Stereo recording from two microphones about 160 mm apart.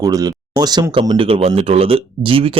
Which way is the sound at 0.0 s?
20° right (ahead or behind).